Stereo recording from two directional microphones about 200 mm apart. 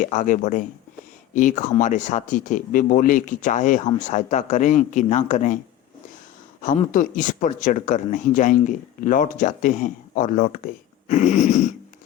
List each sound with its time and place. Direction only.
0.0 s speech: 40° left (ahead or behind)
6.6 s speech: 40° left (ahead or behind)